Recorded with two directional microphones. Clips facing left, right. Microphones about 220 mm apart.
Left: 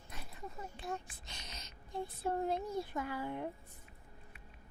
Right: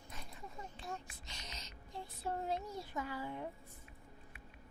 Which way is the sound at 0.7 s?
55° left (ahead or behind).